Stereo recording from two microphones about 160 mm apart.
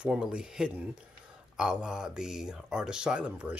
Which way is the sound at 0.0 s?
5° right (ahead or behind).